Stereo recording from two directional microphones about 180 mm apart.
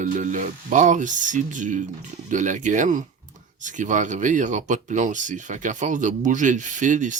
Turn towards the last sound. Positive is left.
turn(degrees=-45)  # may be behind; listen again after turning